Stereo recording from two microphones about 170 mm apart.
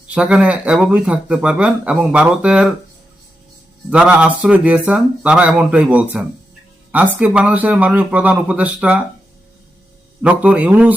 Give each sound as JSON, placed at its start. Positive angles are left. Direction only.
{"t": 0.1, "sound": "speech", "side_deg": -5}
{"t": 3.8, "sound": "speech", "side_deg": -5}
{"t": 10.2, "sound": "speech", "side_deg": -10}